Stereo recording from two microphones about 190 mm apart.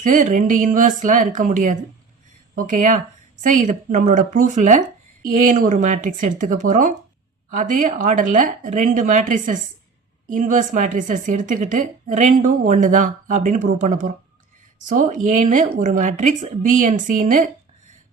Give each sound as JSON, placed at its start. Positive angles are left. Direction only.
{"t": 0.0, "sound": "a woman's voice", "side_deg": -45}